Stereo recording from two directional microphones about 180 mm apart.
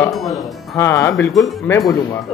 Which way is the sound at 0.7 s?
15° left (ahead or behind).